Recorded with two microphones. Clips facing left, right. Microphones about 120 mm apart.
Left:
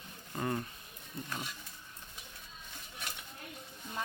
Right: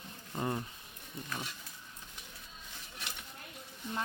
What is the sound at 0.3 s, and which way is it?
Speech, 15° right (ahead or behind).